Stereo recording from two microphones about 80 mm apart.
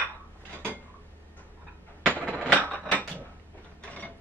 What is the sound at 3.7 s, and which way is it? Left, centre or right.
Mechanisms, centre.